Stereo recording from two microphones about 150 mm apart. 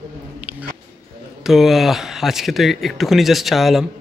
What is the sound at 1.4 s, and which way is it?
Speech, centre (ahead or behind).